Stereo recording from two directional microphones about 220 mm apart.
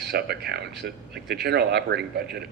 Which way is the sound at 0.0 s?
50° right (ahead or behind).